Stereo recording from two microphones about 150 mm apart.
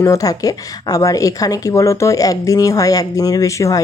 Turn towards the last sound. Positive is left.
turn(degrees=20)  # may be behind; listen again after turning